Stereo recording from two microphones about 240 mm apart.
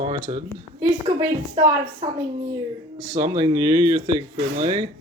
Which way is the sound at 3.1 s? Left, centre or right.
Centre.